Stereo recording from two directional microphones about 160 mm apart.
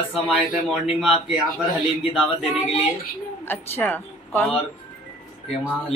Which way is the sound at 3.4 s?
10° left (ahead or behind).